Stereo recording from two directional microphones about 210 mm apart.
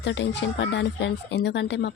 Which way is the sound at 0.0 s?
60° left (ahead or behind).